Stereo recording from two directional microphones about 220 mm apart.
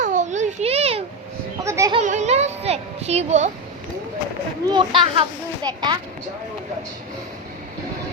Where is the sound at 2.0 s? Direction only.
30° right (ahead or behind).